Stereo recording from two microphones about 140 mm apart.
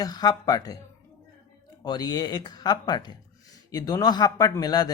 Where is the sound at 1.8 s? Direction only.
30° left (ahead or behind).